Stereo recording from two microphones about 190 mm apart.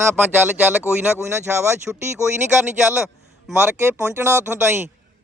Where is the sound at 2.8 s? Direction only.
5° right (ahead or behind).